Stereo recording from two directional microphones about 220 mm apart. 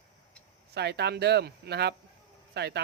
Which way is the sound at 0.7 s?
50° right (ahead or behind).